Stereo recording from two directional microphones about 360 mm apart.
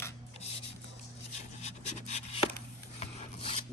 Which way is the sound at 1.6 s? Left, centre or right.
Centre.